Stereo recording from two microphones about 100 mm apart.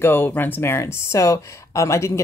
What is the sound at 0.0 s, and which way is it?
Speech, 20° left (ahead or behind).